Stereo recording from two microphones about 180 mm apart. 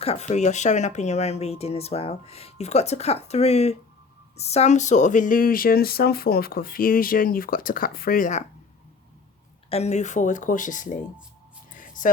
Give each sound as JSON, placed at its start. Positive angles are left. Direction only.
{"t": 0.0, "sound": "speech", "side_deg": 35}
{"t": 9.6, "sound": "speech", "side_deg": 35}
{"t": 11.7, "sound": "a sound", "side_deg": 45}